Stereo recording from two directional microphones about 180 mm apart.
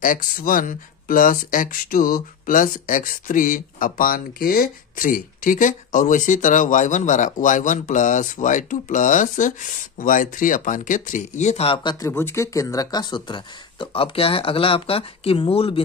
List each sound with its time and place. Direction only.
0.0 s speech: 50° left (ahead or behind); by 12.1 s 25° left (ahead or behind)
12.1 s speech: 15° left (ahead or behind); by 15.8 s 30° left (ahead or behind)